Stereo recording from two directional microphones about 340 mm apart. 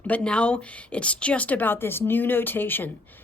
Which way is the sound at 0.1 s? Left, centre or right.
Centre.